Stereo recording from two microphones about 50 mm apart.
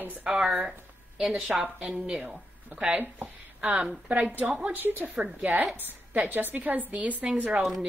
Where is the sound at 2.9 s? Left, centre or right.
Right.